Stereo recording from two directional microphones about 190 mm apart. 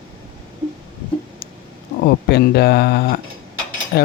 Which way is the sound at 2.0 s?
60° left (ahead or behind).